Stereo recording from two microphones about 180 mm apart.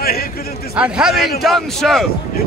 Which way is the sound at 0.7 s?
5° right (ahead or behind).